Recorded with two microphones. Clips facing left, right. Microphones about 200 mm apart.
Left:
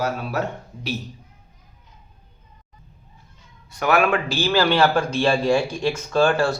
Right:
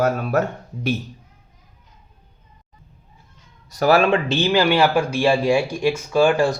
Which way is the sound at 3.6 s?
35° right (ahead or behind).